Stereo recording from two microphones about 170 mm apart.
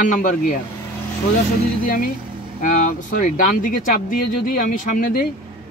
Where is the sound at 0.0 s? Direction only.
50° left (ahead or behind).